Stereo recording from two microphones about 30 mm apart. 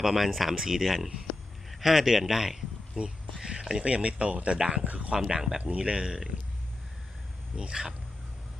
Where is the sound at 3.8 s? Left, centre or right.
Right.